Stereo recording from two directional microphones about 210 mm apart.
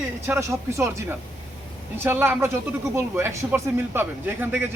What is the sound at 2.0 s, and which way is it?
Speech, 10° right (ahead or behind).